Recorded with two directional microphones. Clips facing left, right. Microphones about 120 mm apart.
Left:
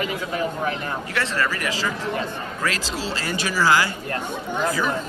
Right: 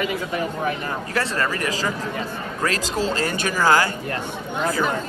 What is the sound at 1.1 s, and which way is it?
Speech, 35° right (ahead or behind).